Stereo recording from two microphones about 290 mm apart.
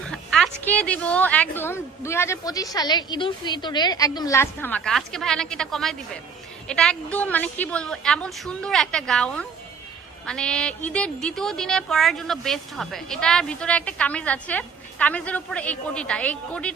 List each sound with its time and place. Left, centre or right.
0.1 s a woman's voice: centre